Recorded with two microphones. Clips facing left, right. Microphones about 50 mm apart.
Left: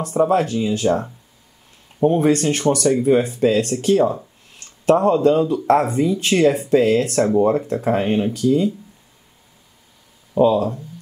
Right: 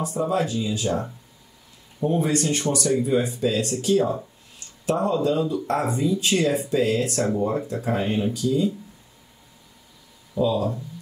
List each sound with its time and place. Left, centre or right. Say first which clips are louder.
0.0 s speech: left 6 dB; left
10.3 s speech: left 7 dB; left